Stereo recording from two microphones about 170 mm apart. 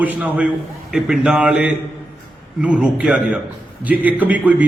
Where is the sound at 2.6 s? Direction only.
5° right (ahead or behind).